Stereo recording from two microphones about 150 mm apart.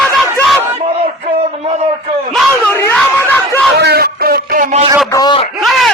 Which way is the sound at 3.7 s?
90° right.